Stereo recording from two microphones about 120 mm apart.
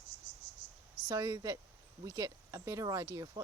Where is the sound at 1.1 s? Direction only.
30° right (ahead or behind).